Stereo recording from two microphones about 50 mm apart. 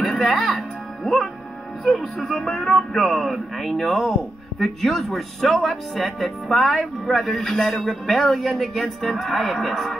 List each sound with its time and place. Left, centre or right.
0.0 s music: left
0.3 s speech: centre
2.2 s music: centre
2.9 s speech: centre